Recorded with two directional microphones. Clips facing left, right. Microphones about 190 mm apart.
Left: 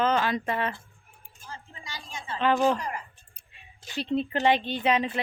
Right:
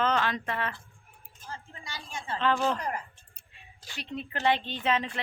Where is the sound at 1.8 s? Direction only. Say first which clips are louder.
Even; 55° right (ahead or behind).